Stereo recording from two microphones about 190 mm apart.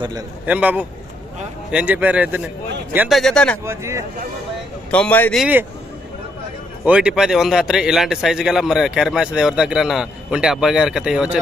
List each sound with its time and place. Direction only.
0.0 s a man's voice: 20° right (ahead or behind)
0.4 s a man's voice: 10° right (ahead or behind)
3.6 s a man's voice: 15° right (ahead or behind)
4.9 s a man's voice: 5° left (ahead or behind)
5.4 s a man's voice: 10° right (ahead or behind)
6.8 s a man's voice: 5° right (ahead or behind)